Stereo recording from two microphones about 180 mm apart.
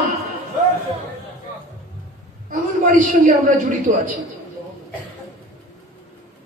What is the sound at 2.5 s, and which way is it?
A man's voice, 45° right (ahead or behind).